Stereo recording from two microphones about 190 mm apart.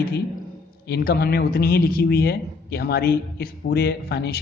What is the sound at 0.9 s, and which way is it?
A man's voice, 55° left (ahead or behind).